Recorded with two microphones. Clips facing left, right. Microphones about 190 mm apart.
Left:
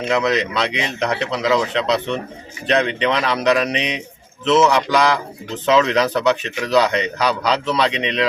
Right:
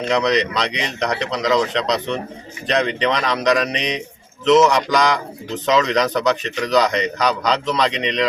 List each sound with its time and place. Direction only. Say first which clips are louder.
0.0 s a man's voice: right 1 dB; 5° left (ahead or behind)